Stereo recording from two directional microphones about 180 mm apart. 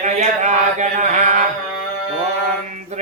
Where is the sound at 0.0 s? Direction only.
40° right (ahead or behind).